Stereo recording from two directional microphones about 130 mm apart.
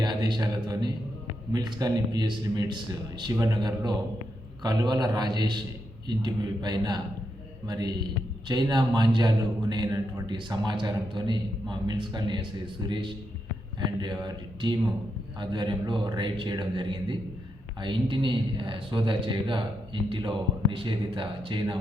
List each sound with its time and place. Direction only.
0.0 s a man's voice: 35° right (ahead or behind)